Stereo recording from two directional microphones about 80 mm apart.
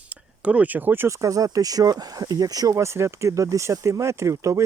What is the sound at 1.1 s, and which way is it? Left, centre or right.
Speech, right.